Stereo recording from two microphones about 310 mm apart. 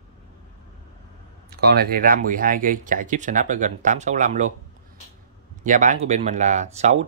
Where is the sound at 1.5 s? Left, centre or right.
Right.